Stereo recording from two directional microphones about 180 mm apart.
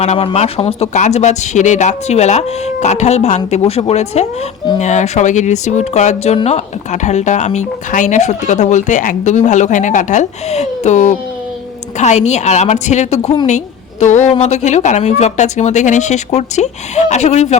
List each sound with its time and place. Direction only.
0.0 s speech: 40° left (ahead or behind)
13.2 s a woman's voice: 25° left (ahead or behind)
14.0 s speech: 40° left (ahead or behind)